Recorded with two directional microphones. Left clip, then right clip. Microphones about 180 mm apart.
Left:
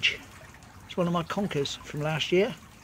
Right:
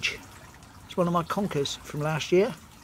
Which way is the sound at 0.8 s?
10° right (ahead or behind).